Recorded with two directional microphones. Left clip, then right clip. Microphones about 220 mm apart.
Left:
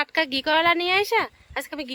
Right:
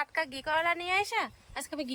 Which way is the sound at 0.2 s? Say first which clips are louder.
Left 10 dB; 30° left (ahead or behind).